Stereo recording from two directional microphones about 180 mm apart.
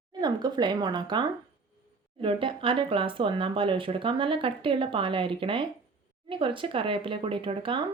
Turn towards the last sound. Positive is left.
turn(degrees=-30)  # may be behind; listen again after turning